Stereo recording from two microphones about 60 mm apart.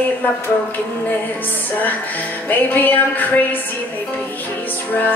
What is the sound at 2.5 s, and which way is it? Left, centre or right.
Music, left.